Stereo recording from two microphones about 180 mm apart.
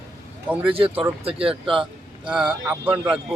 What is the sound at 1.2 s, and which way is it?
Speech, 30° right (ahead or behind).